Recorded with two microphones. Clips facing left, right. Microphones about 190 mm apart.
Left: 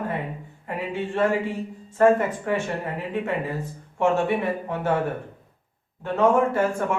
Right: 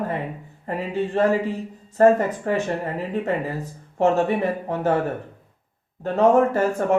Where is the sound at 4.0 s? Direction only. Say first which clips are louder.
Right 2 dB; 40° right (ahead or behind).